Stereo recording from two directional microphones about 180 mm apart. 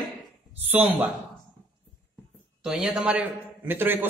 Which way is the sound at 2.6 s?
Centre (ahead or behind).